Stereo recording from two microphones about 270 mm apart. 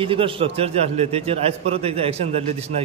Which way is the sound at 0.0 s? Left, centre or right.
Centre.